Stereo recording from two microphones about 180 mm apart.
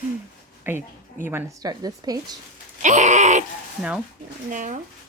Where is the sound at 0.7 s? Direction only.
10° right (ahead or behind).